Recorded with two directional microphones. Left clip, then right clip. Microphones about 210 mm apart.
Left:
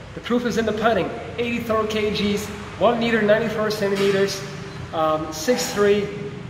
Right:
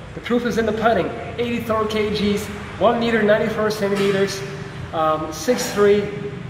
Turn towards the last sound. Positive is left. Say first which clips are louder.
# right 2 dB
turn(degrees=5)  # may be behind; listen again after turning